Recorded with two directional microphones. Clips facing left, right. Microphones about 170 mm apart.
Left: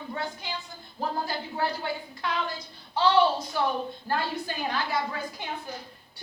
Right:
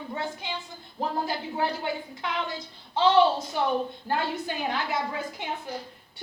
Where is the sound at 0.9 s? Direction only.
25° right (ahead or behind).